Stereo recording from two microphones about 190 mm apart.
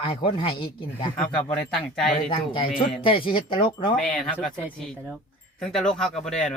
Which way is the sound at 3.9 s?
5° left (ahead or behind).